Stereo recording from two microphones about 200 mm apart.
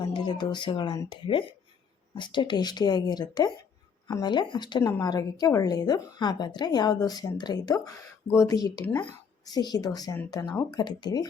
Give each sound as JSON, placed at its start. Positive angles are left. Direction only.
{"t": 0.0, "sound": "a woman's voice", "side_deg": 20}
{"t": 10.8, "sound": "a woman's voice", "side_deg": 20}